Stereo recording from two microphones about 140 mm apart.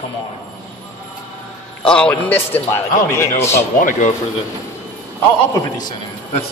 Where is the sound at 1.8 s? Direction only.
5° left (ahead or behind).